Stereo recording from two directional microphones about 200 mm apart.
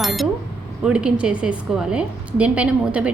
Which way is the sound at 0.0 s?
Centre (ahead or behind).